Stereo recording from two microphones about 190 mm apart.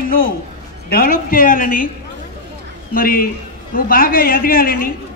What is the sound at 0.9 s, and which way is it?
A man's voice, 50° left (ahead or behind).